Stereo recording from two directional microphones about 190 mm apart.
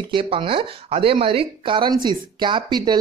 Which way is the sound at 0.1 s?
25° right (ahead or behind).